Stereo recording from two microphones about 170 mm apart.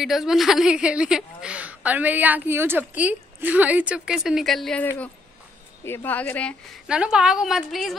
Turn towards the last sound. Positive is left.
turn(degrees=0)  # may be behind; listen again after turning